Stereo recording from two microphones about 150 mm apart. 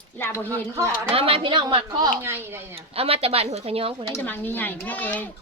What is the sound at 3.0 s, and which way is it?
Speech, 40° right (ahead or behind).